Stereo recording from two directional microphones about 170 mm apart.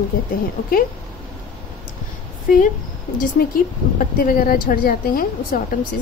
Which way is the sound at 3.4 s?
60° left (ahead or behind).